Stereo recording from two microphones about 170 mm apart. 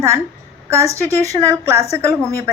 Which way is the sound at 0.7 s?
15° right (ahead or behind).